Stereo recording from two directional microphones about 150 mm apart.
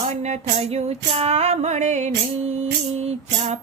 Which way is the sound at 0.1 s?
45° right (ahead or behind).